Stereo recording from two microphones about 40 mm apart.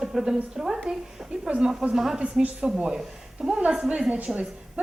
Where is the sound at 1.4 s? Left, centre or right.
Right.